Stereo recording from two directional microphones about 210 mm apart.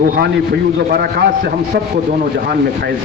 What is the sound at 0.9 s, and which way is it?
Speech, 45° right (ahead or behind).